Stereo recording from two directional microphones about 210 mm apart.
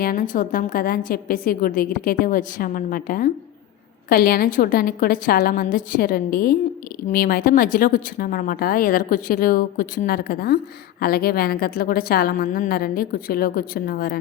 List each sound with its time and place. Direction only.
0.0 s a woman's voice: 45° left (ahead or behind)